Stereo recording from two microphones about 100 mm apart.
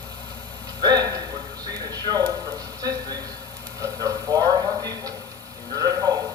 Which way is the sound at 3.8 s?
40° right (ahead or behind).